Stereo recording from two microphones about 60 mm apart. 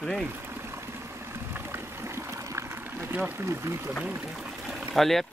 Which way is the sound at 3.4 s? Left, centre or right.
Right.